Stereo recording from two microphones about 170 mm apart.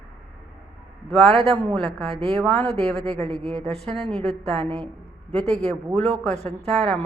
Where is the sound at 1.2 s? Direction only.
35° right (ahead or behind).